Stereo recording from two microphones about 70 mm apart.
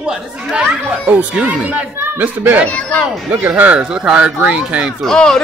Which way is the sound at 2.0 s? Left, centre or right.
Right.